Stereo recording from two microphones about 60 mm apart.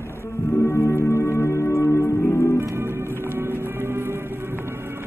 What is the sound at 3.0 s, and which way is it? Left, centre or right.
Music, left.